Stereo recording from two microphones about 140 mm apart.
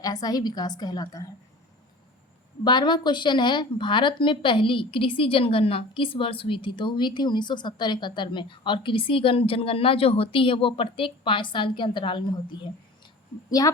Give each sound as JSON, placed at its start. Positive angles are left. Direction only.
{"t": 0.0, "sound": "a woman's voice", "side_deg": 25}
{"t": 2.6, "sound": "a woman's voice", "side_deg": 30}